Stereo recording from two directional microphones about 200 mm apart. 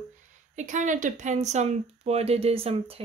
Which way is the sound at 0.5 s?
40° right (ahead or behind).